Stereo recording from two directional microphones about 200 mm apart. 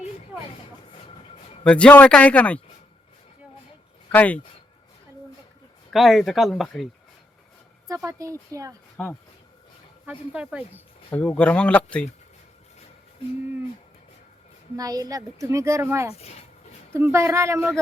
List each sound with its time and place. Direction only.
1.6 s speech: 5° left (ahead or behind)
4.1 s speech: 5° left (ahead or behind)
5.9 s speech: centre (ahead or behind)
7.9 s speech: 15° right (ahead or behind)
9.0 s speech: centre (ahead or behind)
11.1 s speech: 10° left (ahead or behind)
14.8 s speech: 20° right (ahead or behind)
16.1 s speech: 30° left (ahead or behind)
16.9 s speech: 15° right (ahead or behind)